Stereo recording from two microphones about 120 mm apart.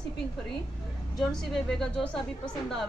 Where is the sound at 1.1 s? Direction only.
Centre (ahead or behind).